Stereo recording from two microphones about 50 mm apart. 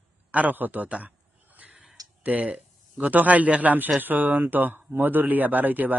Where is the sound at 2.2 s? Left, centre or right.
Right.